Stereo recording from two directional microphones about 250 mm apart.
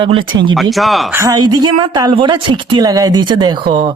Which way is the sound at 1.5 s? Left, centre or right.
Centre.